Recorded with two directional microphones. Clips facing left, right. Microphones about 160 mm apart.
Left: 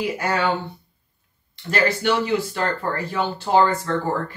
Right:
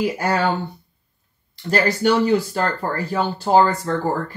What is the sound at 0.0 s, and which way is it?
Speech, 35° right (ahead or behind).